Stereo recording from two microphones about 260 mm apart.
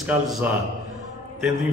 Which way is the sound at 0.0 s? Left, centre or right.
Centre.